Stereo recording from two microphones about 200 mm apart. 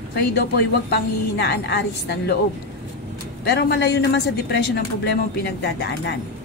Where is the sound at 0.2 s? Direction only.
50° left (ahead or behind).